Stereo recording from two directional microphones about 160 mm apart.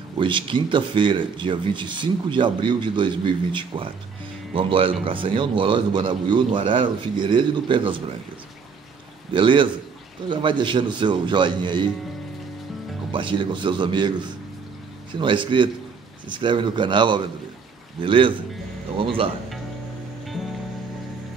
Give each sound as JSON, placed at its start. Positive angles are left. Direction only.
{"t": 0.2, "sound": "speech", "side_deg": -30}
{"t": 9.3, "sound": "speech", "side_deg": -30}
{"t": 13.1, "sound": "speech", "side_deg": -30}